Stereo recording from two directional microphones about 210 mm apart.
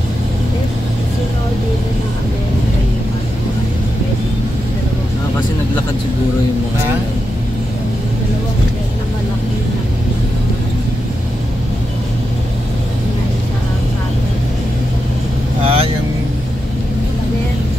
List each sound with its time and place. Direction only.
15.6 s vehicle: 25° right (ahead or behind)